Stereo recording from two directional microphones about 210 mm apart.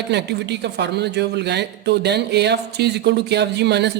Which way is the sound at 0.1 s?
55° right (ahead or behind).